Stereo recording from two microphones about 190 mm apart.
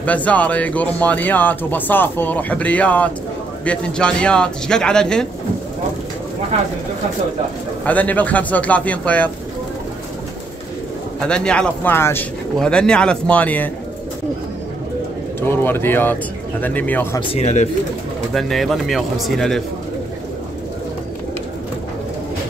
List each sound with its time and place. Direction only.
0.0 s speech: 5° left (ahead or behind)
7.8 s speech: 10° left (ahead or behind)
11.1 s speech: 5° left (ahead or behind)
15.4 s speech: 10° left (ahead or behind)
17.3 s speech: 35° left (ahead or behind)
18.3 s speech: centre (ahead or behind)